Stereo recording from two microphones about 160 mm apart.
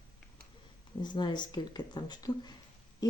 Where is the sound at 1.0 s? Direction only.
30° left (ahead or behind).